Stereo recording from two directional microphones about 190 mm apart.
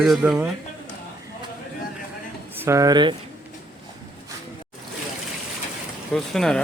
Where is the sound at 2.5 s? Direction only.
15° right (ahead or behind).